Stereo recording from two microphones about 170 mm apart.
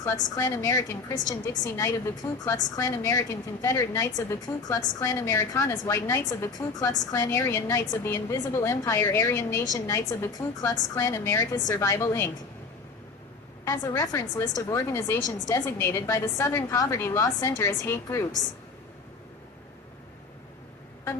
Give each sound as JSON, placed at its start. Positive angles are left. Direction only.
{"t": 0.0, "sound": "a woman's voice", "side_deg": 15}
{"t": 13.7, "sound": "a woman's voice", "side_deg": 20}